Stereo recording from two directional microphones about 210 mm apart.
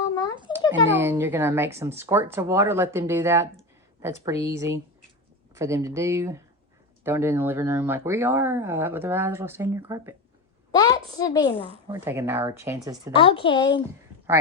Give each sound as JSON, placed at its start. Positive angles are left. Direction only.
{"t": 0.7, "sound": "speech", "side_deg": -10}
{"t": 10.7, "sound": "a woman's voice", "side_deg": 20}
{"t": 11.9, "sound": "speech", "side_deg": -10}
{"t": 13.1, "sound": "a woman's voice", "side_deg": 25}